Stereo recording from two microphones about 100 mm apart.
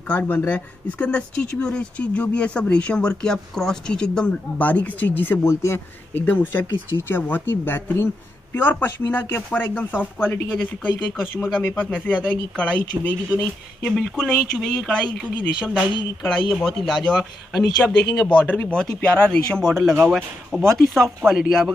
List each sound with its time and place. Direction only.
0.1 s speech: 15° left (ahead or behind)
16.2 s speech: centre (ahead or behind)
17.8 s speech: 20° left (ahead or behind); by 21.7 s 5° left (ahead or behind)